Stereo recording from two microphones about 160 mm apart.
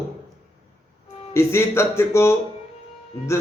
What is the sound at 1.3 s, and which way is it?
A man's voice, 15° left (ahead or behind).